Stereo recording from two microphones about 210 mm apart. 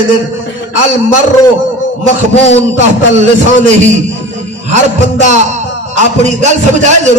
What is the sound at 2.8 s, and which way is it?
Music, 35° right (ahead or behind).